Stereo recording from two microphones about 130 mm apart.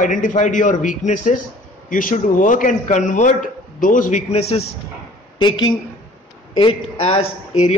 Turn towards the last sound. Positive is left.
turn(degrees=55)  # may be behind; listen again after turning